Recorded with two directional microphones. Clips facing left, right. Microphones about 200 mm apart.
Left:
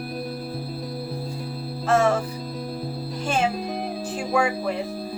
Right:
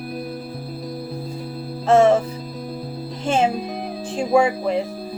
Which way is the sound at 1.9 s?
25° right (ahead or behind).